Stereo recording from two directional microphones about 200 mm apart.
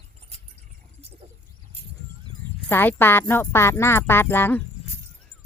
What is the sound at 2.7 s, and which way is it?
Speech, 10° left (ahead or behind).